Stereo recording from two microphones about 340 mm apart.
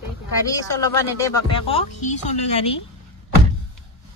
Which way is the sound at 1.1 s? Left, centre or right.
Centre.